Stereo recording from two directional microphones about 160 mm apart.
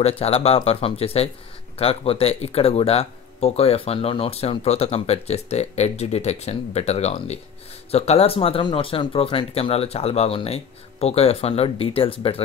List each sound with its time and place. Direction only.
0.0 s speech: 40° left (ahead or behind)